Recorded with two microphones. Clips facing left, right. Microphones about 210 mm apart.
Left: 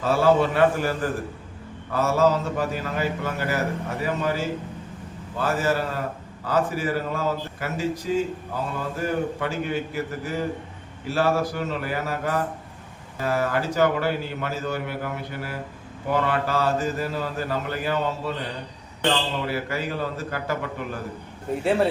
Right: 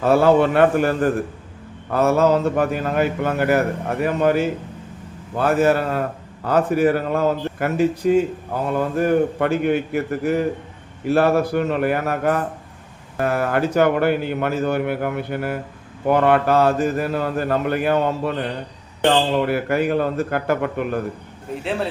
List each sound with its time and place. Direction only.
0.0 s a man's voice: 60° right (ahead or behind)
19.4 s a man's voice: 55° right (ahead or behind)